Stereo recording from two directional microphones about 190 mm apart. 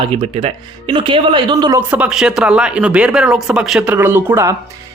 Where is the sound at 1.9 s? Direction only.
5° right (ahead or behind).